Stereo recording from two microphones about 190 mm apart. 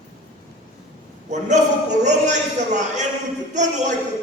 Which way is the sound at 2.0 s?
40° right (ahead or behind).